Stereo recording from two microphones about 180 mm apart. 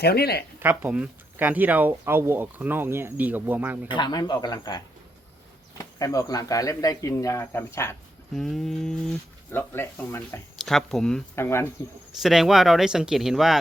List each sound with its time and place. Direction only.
0.0 s speech: 60° left (ahead or behind)
0.6 s speech: 10° right (ahead or behind)
3.9 s speech: 25° left (ahead or behind)
8.4 s speech: centre (ahead or behind)
10.7 s speech: centre (ahead or behind)
11.3 s speech: 15° left (ahead or behind)
12.2 s speech: centre (ahead or behind)